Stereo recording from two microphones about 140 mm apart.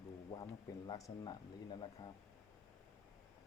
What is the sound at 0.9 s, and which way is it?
Speech, 25° left (ahead or behind).